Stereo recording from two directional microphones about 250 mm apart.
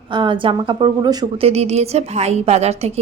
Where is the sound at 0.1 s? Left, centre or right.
Centre.